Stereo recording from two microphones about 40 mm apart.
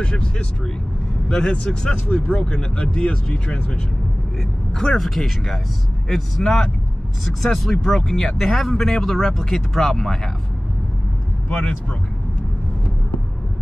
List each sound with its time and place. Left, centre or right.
0.0 s speech: left
2.0 s speech: left
4.7 s speech: centre